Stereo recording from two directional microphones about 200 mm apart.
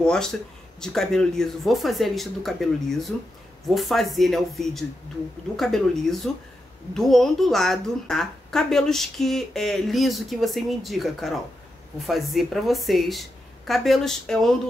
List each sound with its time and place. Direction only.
0.0 s speech: 5° left (ahead or behind)